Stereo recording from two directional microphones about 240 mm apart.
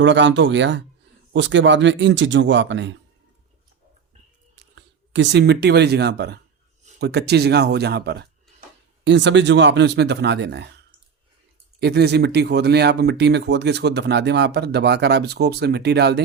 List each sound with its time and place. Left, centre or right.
0.0 s speech: right
4.5 s speech: right
11.8 s speech: right